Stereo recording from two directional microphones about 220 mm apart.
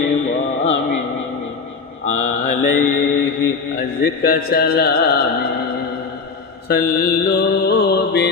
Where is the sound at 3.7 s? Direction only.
45° left (ahead or behind).